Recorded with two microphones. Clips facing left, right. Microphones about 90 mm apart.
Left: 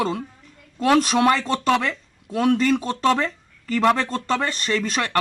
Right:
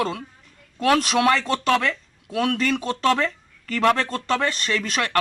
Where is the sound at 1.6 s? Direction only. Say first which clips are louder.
Left 1 dB; 20° left (ahead or behind).